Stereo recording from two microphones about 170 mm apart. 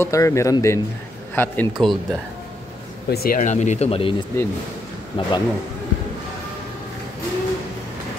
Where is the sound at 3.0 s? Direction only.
65° left (ahead or behind); by 4.2 s 30° left (ahead or behind).